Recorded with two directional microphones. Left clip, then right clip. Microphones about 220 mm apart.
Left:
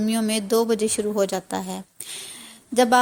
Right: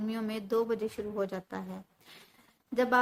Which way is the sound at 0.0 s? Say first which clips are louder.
Left 12 dB; 30° left (ahead or behind).